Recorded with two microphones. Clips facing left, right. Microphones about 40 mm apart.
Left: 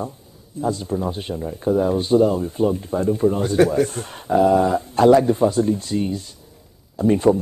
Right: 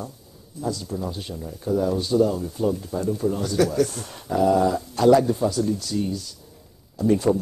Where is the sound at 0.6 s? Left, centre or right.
Left.